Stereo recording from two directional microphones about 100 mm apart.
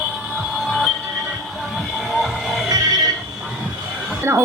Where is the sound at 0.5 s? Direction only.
Centre (ahead or behind).